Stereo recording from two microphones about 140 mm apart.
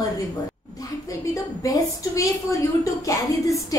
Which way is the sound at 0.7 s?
25° left (ahead or behind).